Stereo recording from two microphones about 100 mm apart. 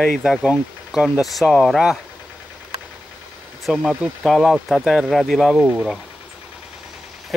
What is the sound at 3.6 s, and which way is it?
Speech, centre (ahead or behind).